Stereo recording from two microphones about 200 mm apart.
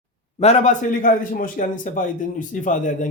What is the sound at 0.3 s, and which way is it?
A man's voice, 35° left (ahead or behind).